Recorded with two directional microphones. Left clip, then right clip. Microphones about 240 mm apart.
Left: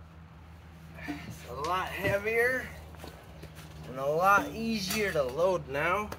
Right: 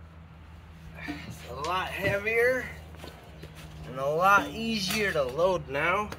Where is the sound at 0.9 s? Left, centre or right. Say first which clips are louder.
Right 2 dB; centre.